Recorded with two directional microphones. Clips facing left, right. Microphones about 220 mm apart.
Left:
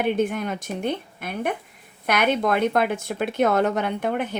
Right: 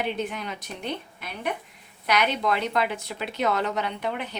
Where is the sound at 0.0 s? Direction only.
50° left (ahead or behind).